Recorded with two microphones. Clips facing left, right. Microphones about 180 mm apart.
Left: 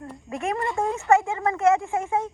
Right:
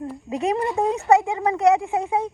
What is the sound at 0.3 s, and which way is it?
A woman's voice, 20° right (ahead or behind).